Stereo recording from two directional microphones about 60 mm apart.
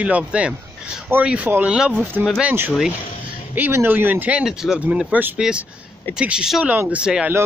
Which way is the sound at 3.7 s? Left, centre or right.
Right.